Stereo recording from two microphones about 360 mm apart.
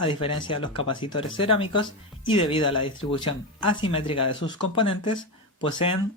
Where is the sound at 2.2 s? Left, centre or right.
Centre.